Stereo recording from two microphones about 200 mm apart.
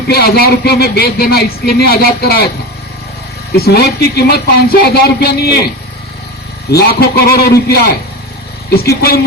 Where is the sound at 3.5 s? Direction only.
50° left (ahead or behind).